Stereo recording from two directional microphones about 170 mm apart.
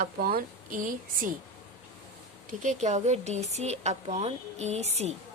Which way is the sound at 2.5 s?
45° right (ahead or behind).